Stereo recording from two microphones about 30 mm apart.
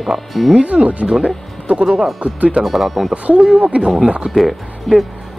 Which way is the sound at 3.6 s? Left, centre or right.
Right.